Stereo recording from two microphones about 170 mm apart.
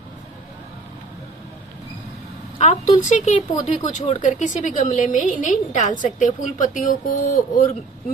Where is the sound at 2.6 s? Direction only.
45° left (ahead or behind).